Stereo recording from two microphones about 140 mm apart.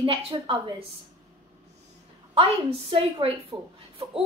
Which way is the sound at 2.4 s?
40° right (ahead or behind).